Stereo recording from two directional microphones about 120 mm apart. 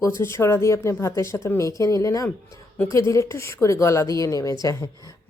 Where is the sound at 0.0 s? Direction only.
20° left (ahead or behind).